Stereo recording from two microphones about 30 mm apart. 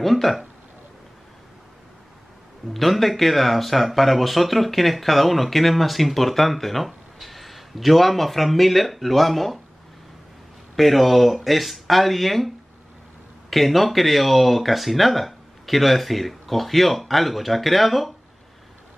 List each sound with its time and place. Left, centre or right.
0.0 s speech: centre
2.7 s speech: centre
10.8 s speech: centre